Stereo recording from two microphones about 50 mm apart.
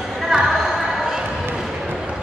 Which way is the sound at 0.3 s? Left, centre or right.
Centre.